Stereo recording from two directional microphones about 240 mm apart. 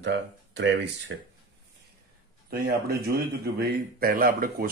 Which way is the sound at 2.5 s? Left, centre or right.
Right.